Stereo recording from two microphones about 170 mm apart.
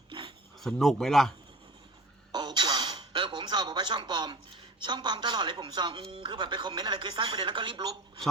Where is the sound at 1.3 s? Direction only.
30° right (ahead or behind).